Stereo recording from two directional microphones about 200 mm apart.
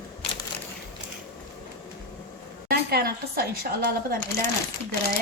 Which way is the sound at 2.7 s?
50° right (ahead or behind).